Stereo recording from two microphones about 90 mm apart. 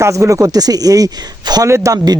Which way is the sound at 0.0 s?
35° right (ahead or behind).